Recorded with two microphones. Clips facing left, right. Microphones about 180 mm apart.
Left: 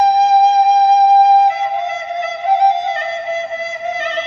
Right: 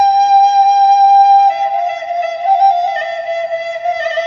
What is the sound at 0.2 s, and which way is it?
Flute, 40° right (ahead or behind).